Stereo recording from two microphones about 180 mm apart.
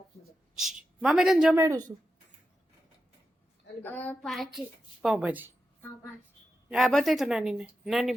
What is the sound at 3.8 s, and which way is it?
Speech, 10° left (ahead or behind).